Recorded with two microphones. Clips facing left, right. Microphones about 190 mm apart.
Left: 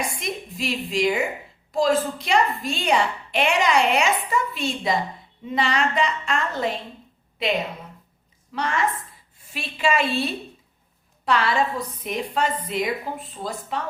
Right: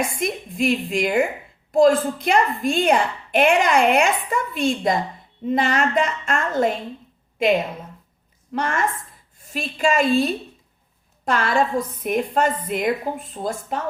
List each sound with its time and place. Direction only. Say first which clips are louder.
0.0 s a woman's voice: right 5 dB; 55° right (ahead or behind)